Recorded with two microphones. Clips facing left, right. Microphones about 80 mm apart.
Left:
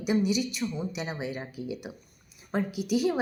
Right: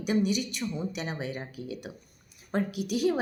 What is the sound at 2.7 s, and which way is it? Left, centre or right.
Speech, right.